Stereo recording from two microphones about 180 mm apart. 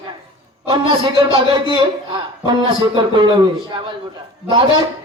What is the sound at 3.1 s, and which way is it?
Speech, 25° right (ahead or behind).